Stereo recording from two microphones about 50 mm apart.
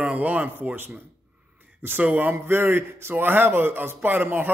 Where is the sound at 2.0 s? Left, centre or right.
Right.